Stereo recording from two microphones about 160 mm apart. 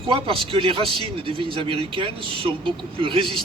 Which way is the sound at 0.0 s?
35° right (ahead or behind).